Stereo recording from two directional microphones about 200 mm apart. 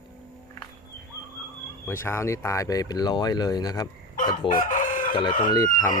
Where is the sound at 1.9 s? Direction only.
15° left (ahead or behind).